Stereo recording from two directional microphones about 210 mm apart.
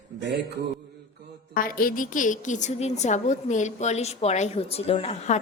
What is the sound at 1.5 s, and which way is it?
A woman's voice, 40° left (ahead or behind).